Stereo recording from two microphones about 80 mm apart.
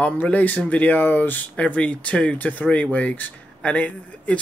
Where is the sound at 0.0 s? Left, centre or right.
Centre.